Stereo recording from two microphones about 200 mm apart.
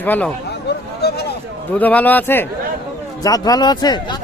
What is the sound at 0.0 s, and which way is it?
Speech, 10° left (ahead or behind).